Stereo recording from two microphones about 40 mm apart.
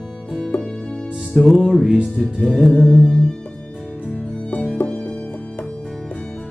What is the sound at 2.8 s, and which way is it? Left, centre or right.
Music, left.